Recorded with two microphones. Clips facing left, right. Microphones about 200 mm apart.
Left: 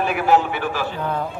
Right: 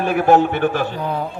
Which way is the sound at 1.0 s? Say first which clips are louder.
Right 1 dB; 10° right (ahead or behind).